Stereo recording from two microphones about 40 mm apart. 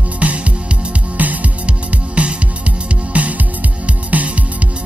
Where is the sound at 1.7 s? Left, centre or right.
Right.